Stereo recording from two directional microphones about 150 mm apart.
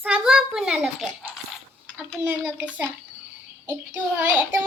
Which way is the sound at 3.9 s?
15° right (ahead or behind).